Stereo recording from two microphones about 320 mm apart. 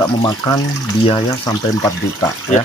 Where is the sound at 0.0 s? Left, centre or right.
Centre.